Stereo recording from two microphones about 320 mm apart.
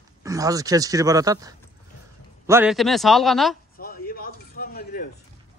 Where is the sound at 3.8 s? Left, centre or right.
Left.